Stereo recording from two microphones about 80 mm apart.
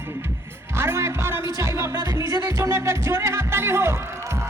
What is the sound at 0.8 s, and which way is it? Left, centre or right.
Music, right.